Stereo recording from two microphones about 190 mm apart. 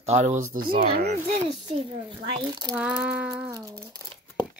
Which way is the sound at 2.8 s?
5° right (ahead or behind).